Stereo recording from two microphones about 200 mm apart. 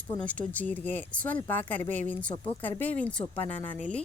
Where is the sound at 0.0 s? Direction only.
5° left (ahead or behind).